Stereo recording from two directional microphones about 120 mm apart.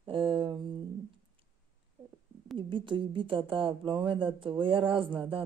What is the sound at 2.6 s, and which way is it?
Speech, 45° right (ahead or behind).